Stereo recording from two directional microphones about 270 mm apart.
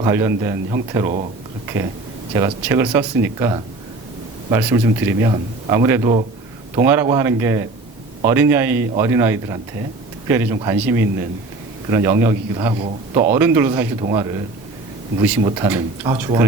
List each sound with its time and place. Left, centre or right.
0.0 s a man's voice: centre
1.6 s a sound: centre
2.3 s a man's voice: centre
15.4 s a man's voice: centre